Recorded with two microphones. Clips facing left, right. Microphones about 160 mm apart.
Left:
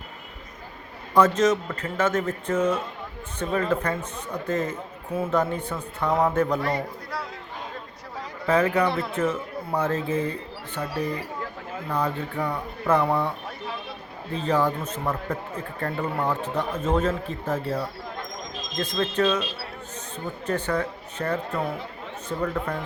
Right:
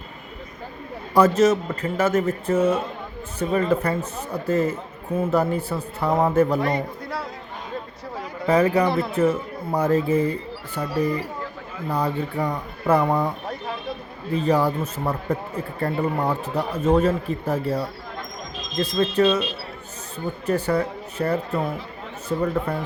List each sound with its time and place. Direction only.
1.1 s speech: 10° right (ahead or behind)
6.6 s speech: 20° right (ahead or behind)
8.4 s speech: 10° right (ahead or behind)
11.9 s speech: 10° right (ahead or behind)
14.3 s speech: 10° right (ahead or behind)
20.5 s speech: 10° right (ahead or behind)